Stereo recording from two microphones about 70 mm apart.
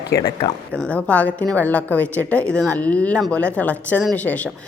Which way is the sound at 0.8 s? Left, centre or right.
Centre.